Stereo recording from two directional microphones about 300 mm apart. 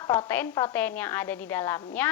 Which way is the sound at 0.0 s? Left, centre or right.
Centre.